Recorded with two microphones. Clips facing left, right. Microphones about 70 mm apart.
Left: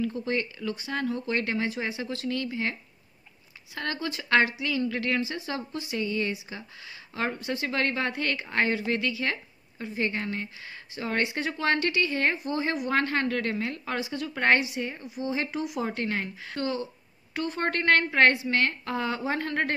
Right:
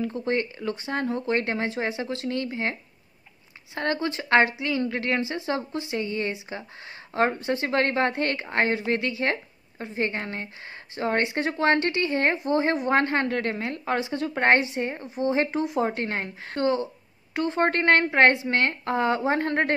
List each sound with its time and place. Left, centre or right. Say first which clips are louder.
0.0 s a woman's voice: right 3 dB; right